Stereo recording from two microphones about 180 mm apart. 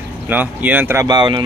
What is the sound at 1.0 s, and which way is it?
Speech, 25° right (ahead or behind).